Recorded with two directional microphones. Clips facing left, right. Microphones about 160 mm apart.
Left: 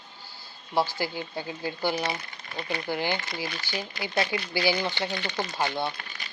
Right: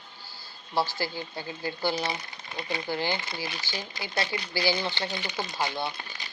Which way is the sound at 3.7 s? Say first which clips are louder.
Left 4 dB; 20° left (ahead or behind).